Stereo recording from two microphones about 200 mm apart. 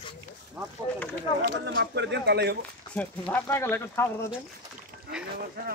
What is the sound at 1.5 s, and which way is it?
Speech, 60° right (ahead or behind).